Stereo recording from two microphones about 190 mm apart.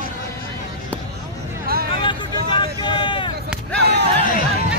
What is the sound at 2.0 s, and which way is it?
Vehicle, 25° left (ahead or behind).